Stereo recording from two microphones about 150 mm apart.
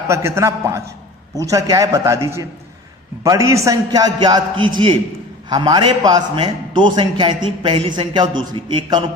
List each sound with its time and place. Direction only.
0.1 s a man's voice: 20° right (ahead or behind)